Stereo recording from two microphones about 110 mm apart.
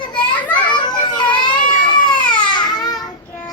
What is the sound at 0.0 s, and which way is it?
Children playing, 45° left (ahead or behind).